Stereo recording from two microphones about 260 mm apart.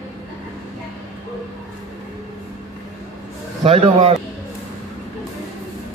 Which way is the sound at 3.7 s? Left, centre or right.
Right.